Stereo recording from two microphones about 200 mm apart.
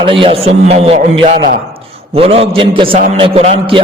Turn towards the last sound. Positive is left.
turn(degrees=-30)  # may be behind; listen again after turning